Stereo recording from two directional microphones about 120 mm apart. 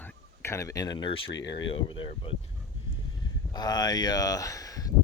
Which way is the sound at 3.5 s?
35° left (ahead or behind).